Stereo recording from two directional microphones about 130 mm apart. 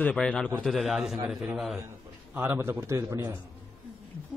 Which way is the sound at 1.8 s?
15° right (ahead or behind).